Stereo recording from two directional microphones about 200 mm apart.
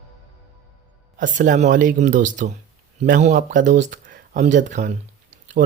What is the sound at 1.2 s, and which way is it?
Speech, 40° right (ahead or behind).